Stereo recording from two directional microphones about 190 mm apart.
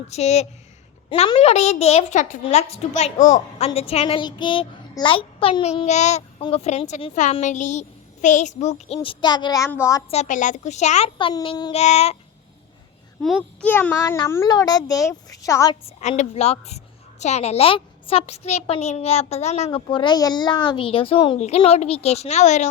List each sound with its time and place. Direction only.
0.1 s a child's voice: 35° left (ahead or behind); by 10.0 s 15° left (ahead or behind)
10.1 s a child's voice: 40° left (ahead or behind); by 11.7 s 20° left (ahead or behind)
11.7 s a child's voice: 35° left (ahead or behind)
13.2 s a child's voice: 5° left (ahead or behind)
15.7 s a child's voice: 30° left (ahead or behind)